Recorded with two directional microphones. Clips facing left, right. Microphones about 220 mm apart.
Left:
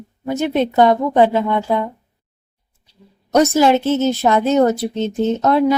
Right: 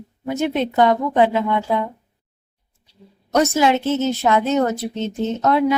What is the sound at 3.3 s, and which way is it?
Speech, 40° left (ahead or behind).